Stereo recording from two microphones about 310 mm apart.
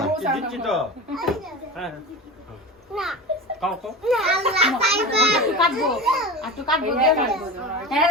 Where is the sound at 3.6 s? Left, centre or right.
Centre.